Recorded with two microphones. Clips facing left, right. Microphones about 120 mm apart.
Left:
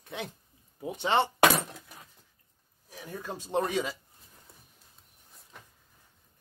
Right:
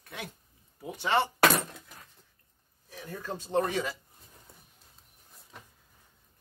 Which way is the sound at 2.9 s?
15° left (ahead or behind).